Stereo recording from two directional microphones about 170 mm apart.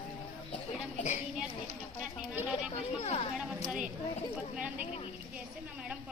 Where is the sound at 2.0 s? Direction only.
5° right (ahead or behind).